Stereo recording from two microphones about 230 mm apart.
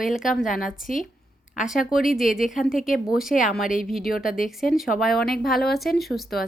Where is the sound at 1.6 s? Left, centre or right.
Centre.